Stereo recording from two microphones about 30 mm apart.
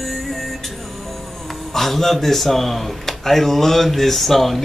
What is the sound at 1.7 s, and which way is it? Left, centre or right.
Speech, centre.